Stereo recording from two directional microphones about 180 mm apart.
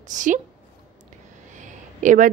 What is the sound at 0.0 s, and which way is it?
Speech, 45° right (ahead or behind).